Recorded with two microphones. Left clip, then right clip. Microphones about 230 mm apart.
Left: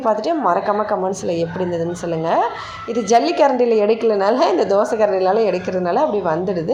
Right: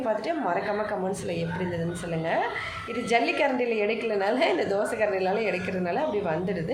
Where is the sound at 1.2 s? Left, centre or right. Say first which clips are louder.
Left 11 dB; centre.